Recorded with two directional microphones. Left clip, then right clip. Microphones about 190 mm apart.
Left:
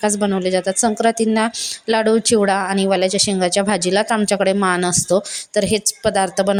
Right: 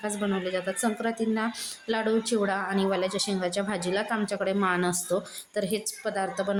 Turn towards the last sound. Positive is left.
turn(degrees=45)  # may be behind; listen again after turning